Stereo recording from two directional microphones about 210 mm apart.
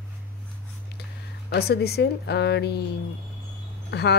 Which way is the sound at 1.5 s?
50° left (ahead or behind).